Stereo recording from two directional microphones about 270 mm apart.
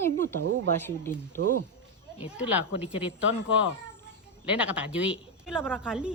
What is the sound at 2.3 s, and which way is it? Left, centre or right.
Speech, centre.